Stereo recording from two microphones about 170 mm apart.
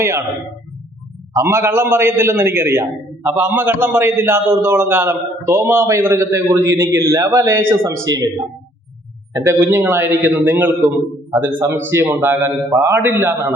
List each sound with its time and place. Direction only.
0.0 s a man's voice: 15° right (ahead or behind)
1.4 s a man's voice: 15° right (ahead or behind)
9.3 s a man's voice: 15° right (ahead or behind)